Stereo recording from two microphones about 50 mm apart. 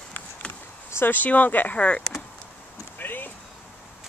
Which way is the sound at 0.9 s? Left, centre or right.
Left.